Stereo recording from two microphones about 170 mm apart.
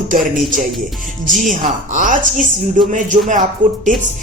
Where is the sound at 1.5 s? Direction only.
50° right (ahead or behind).